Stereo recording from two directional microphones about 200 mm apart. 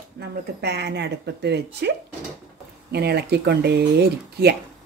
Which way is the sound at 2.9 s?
55° right (ahead or behind).